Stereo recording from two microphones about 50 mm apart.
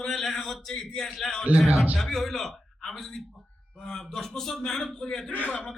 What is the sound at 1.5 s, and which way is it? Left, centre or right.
Speech, right.